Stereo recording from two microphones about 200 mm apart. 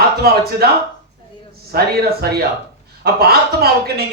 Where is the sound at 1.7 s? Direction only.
50° right (ahead or behind).